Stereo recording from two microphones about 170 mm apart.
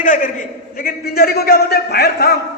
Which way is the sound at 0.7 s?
60° left (ahead or behind).